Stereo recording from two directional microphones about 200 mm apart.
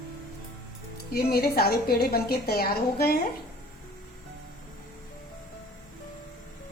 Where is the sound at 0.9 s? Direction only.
50° left (ahead or behind).